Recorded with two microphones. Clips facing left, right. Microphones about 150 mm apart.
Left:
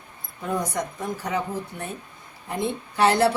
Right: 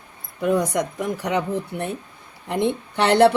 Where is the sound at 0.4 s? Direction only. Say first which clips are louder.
Right 7 dB; 75° right (ahead or behind).